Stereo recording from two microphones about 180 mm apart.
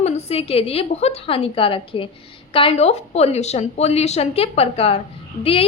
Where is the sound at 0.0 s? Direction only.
35° left (ahead or behind).